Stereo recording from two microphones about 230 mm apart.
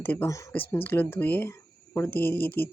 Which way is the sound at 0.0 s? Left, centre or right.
Centre.